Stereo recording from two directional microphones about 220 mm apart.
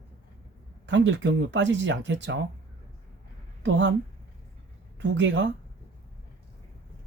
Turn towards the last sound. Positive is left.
turn(degrees=-55)  # may be behind; listen again after turning